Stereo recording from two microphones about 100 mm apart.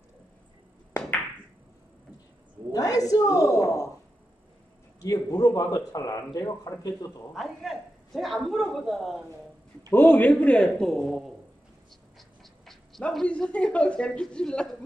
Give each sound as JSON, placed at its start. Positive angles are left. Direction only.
{"t": 2.7, "sound": "speech", "side_deg": 35}
{"t": 5.0, "sound": "a man's voice", "side_deg": 25}
{"t": 5.4, "sound": "speech", "side_deg": 35}
{"t": 7.3, "sound": "a man's voice", "side_deg": 0}
{"t": 9.8, "sound": "a woman's voice", "side_deg": 20}
{"t": 12.2, "sound": "dog", "side_deg": 0}
{"t": 13.1, "sound": "a woman's voice", "side_deg": 5}